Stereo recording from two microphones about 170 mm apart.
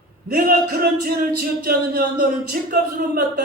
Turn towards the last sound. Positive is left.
turn(degrees=-60)  # may be behind; listen again after turning